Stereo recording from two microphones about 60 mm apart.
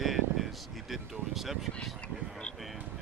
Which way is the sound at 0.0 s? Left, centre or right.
Centre.